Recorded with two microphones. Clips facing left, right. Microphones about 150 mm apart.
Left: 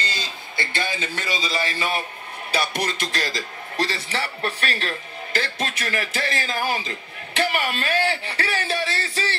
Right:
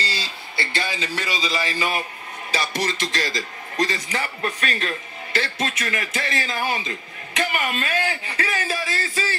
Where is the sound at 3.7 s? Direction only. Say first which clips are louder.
Right 1 dB; 30° left (ahead or behind).